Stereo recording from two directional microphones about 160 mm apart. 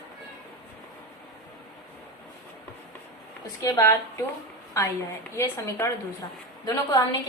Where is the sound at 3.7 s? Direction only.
20° left (ahead or behind).